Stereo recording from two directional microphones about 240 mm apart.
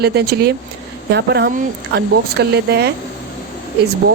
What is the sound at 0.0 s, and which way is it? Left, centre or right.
Speech, right.